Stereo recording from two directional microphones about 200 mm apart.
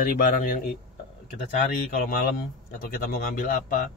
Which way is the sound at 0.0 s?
45° left (ahead or behind).